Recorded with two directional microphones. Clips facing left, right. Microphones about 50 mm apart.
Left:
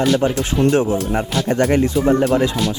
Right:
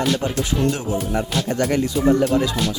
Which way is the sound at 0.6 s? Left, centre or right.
Left.